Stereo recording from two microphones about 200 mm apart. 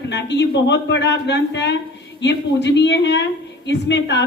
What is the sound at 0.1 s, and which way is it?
Speech, 60° left (ahead or behind).